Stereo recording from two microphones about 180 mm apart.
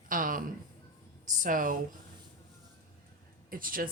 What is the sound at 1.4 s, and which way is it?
Speech, 50° right (ahead or behind).